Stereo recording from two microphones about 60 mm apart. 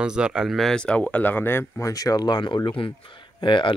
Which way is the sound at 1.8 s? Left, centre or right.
Left.